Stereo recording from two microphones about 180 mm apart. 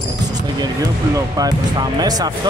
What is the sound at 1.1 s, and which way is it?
Speech, 20° right (ahead or behind).